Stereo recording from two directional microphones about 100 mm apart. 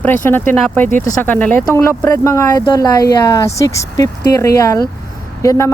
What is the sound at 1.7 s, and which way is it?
Speech, 30° left (ahead or behind).